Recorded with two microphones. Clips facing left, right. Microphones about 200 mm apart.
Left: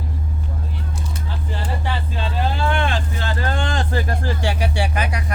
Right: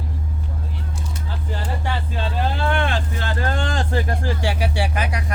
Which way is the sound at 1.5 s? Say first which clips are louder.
Even; 45° right (ahead or behind).